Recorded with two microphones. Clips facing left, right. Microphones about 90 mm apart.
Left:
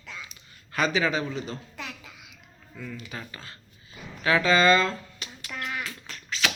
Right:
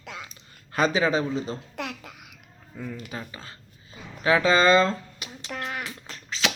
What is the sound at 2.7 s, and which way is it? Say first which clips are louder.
Speech: right 3 dB; 35° right (ahead or behind).